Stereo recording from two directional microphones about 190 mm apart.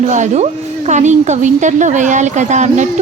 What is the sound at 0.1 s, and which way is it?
A woman's voice, 40° right (ahead or behind).